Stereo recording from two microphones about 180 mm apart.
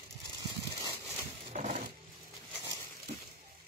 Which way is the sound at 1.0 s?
40° right (ahead or behind).